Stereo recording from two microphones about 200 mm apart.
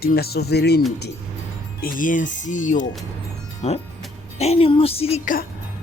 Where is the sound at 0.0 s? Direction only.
50° left (ahead or behind).